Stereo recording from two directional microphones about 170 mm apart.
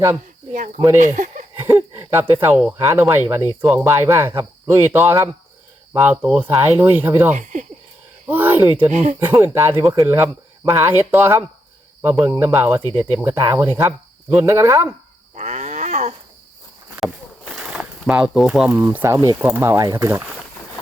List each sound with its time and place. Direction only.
0.5 s speech: 50° right (ahead or behind)
1.5 s a sound: 15° right (ahead or behind)
2.7 s speech: 15° right (ahead or behind)
3.8 s speech: 15° right (ahead or behind)
7.3 s speech: 45° right (ahead or behind)
8.3 s speech: 10° right (ahead or behind)
8.9 s speech: 40° right (ahead or behind)
9.1 s speech: 15° right (ahead or behind)
15.4 s a sound: 45° right (ahead or behind)
17.0 s speech: centre (ahead or behind); by 20.2 s 20° right (ahead or behind)